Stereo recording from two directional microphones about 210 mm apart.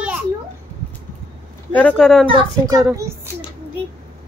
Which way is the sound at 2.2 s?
20° right (ahead or behind).